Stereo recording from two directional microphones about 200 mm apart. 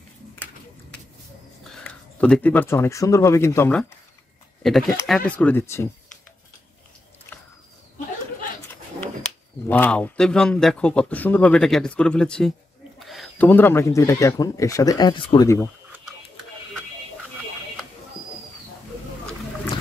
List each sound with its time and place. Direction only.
1.6 s speech: 5° left (ahead or behind)
9.7 s speech: 5° left (ahead or behind); by 15.4 s 25° left (ahead or behind)
15.4 s speech: 10° left (ahead or behind)